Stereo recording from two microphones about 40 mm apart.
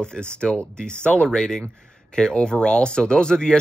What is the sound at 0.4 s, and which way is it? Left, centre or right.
Speech, left.